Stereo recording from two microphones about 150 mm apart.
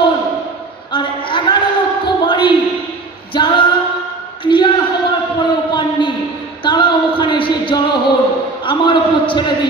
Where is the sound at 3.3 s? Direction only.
30° left (ahead or behind).